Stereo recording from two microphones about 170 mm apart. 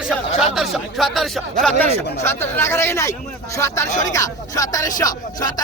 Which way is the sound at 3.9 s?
45° left (ahead or behind).